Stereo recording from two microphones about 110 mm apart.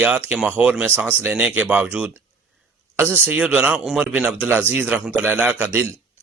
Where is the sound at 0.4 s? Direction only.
15° right (ahead or behind).